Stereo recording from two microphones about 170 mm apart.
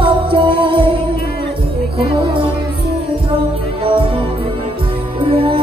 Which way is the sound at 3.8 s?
30° right (ahead or behind).